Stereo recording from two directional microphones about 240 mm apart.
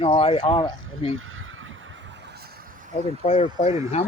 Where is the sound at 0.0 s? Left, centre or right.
Left.